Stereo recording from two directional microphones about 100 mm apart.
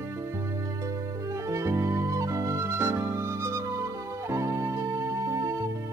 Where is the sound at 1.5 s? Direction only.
30° right (ahead or behind).